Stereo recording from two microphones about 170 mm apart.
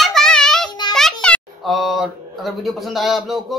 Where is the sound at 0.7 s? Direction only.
25° left (ahead or behind).